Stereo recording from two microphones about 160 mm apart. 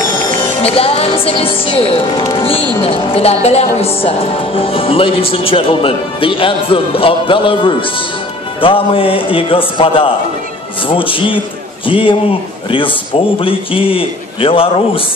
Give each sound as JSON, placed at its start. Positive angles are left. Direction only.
{"t": 0.6, "sound": "speech", "side_deg": 40}
{"t": 13.4, "sound": "speech", "side_deg": 35}